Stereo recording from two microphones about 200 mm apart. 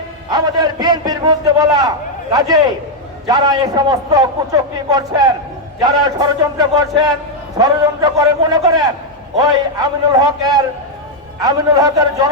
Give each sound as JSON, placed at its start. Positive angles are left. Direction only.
{"t": 0.3, "sound": "a man's voice", "side_deg": -20}
{"t": 3.2, "sound": "a man's voice", "side_deg": -20}